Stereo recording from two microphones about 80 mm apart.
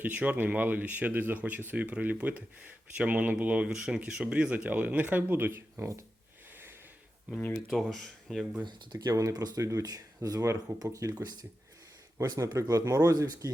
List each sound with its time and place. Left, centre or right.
0.0 s speech: centre; by 6.0 s right
7.3 s speech: centre
7.7 s speech: centre
8.6 s speech: right
9.1 s speech: right
9.6 s speech: right
12.4 s speech: right